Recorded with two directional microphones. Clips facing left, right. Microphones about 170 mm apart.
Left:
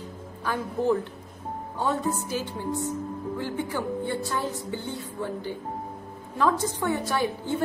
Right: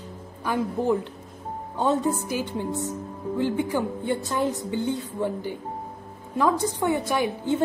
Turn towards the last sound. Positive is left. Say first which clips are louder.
# right 3 dB
turn(degrees=-15)  # may be behind; listen again after turning